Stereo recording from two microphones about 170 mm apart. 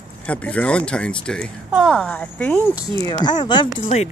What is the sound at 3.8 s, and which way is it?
Speech, 40° left (ahead or behind).